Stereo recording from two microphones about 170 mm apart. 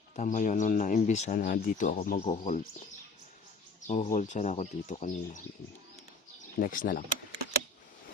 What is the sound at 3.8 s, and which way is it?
Speech, 45° left (ahead or behind).